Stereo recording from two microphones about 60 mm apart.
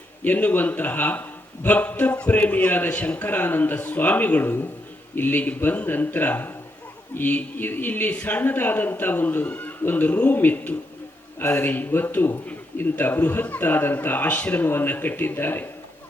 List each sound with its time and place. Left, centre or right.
0.3 s a man's voice: left